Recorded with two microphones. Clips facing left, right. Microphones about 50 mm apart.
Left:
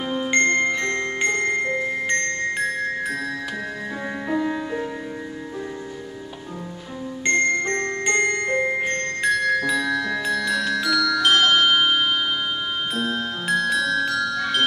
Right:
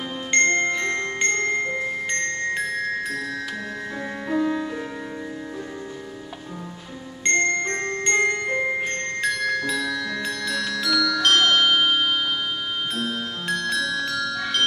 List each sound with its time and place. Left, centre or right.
0.1 s mallet percussion: centre
0.9 s glockenspiel: centre
4.3 s music: centre
7.2 s music: centre
7.9 s glockenspiel: centre
8.8 s music: centre